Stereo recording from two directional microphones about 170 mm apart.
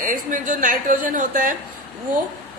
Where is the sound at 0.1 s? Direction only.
50° right (ahead or behind).